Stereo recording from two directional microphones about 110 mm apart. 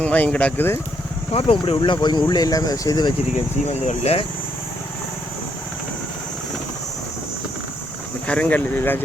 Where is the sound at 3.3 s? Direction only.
75° left (ahead or behind).